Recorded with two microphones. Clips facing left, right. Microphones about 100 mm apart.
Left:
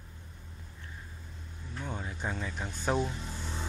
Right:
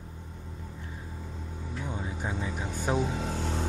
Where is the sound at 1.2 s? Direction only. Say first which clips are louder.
Right 9 dB; 90° right.